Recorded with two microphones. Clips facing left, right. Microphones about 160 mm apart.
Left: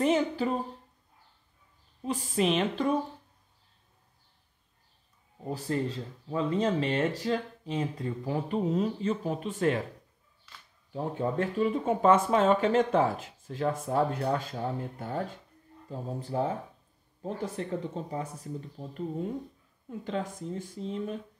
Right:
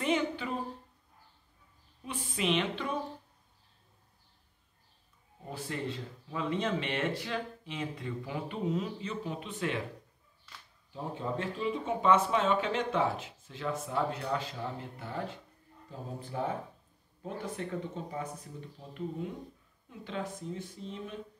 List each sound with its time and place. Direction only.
0.0 s speech: 40° left (ahead or behind)
2.0 s speech: 40° left (ahead or behind)
5.5 s speech: 35° left (ahead or behind)
10.9 s speech: 50° left (ahead or behind)